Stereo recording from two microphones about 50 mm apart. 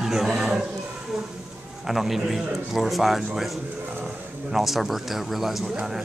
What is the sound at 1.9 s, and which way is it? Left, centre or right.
Speech, centre.